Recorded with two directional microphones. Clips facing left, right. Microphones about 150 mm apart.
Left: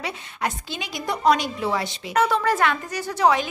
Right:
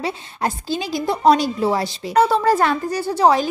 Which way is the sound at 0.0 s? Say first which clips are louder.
Right 5 dB; 35° right (ahead or behind).